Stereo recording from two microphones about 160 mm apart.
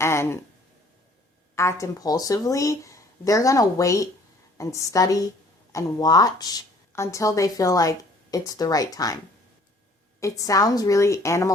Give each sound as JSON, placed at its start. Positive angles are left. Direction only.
{"t": 0.0, "sound": "a sound", "side_deg": 15}
{"t": 1.5, "sound": "a woman's voice", "side_deg": 20}
{"t": 10.2, "sound": "a woman's voice", "side_deg": 20}